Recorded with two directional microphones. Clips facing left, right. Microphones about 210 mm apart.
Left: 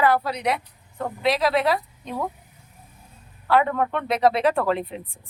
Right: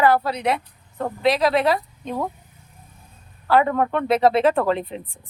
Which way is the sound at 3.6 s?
35° right (ahead or behind).